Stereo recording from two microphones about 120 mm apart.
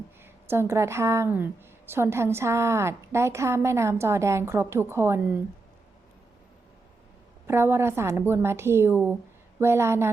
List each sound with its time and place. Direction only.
0.2 s a woman's voice: 20° right (ahead or behind)
7.4 s a woman's voice: 20° right (ahead or behind)